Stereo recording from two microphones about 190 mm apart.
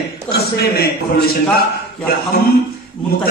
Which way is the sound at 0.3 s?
55° left (ahead or behind).